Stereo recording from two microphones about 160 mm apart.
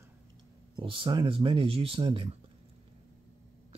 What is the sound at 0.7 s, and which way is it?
Speech, 30° right (ahead or behind).